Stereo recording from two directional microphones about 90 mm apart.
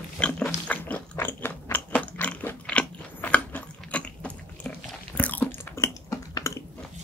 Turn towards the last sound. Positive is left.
turn(degrees=35)  # may be behind; listen again after turning